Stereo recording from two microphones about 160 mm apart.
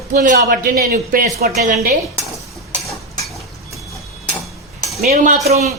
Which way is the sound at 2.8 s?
Centre (ahead or behind).